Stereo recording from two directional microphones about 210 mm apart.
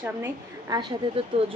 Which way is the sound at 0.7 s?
20° right (ahead or behind).